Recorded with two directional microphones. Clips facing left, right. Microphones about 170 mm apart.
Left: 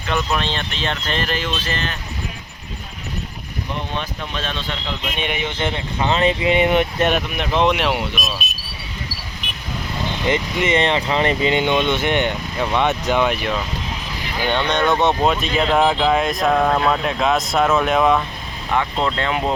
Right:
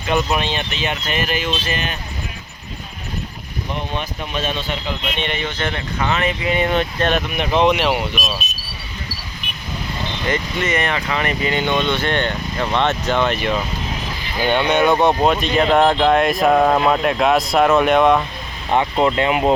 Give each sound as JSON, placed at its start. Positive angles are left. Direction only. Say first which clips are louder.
{"t": 0.1, "sound": "speech", "louder": "right 3 dB", "side_deg": -15}
{"t": 3.9, "sound": "speech", "louder": "right 2 dB", "side_deg": -10}
{"t": 5.1, "sound": "speech", "louder": "left 2 dB", "side_deg": 10}
{"t": 5.5, "sound": "speech", "louder": "left 1 dB", "side_deg": 25}
{"t": 7.3, "sound": "speech", "louder": "right 2 dB", "side_deg": 0}
{"t": 10.2, "sound": "speech", "louder": "left 2 dB", "side_deg": 20}
{"t": 14.4, "sound": "speech", "louder": "right 3 dB", "side_deg": -10}
{"t": 18.9, "sound": "speech", "louder": "right 4 dB", "side_deg": -15}